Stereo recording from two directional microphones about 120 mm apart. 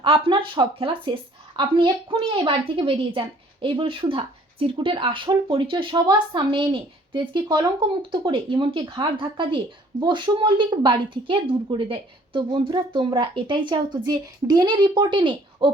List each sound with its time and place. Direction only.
0.0 s a woman's voice: 45° right (ahead or behind)